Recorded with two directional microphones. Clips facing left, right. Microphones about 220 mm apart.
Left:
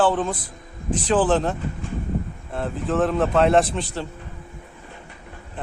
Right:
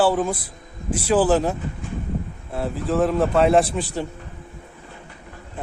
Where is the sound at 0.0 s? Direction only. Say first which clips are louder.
Right 1 dB; 10° right (ahead or behind).